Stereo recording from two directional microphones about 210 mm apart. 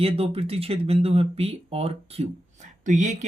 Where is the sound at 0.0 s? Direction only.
30° right (ahead or behind).